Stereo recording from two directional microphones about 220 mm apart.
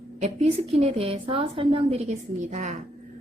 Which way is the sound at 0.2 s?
30° right (ahead or behind).